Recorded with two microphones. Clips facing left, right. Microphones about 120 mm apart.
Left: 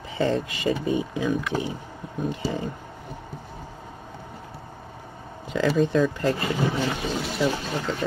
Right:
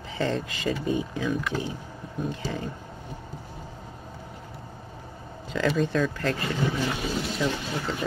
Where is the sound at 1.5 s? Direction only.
50° left (ahead or behind).